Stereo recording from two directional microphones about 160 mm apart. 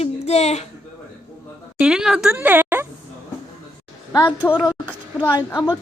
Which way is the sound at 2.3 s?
10° right (ahead or behind).